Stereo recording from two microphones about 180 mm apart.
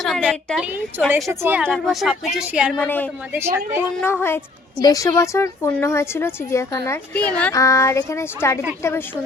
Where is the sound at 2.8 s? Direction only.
10° left (ahead or behind).